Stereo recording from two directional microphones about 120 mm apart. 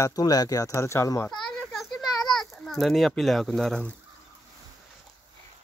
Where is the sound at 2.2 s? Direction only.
5° left (ahead or behind).